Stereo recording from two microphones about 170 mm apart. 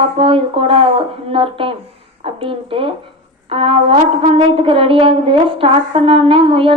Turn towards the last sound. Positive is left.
turn(degrees=-35)  # may be behind; listen again after turning